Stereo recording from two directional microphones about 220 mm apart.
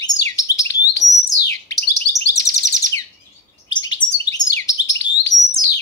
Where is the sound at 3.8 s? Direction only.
60° left (ahead or behind).